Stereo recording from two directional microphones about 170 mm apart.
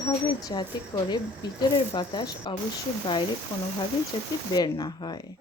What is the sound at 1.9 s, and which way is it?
Speech, 25° left (ahead or behind).